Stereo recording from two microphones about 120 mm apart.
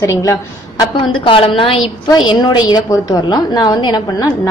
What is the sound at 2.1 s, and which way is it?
A woman's voice, 35° left (ahead or behind).